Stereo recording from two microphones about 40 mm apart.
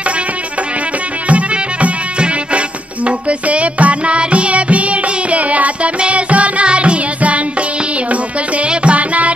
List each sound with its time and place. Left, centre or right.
1.3 s music: right
8.6 s music: right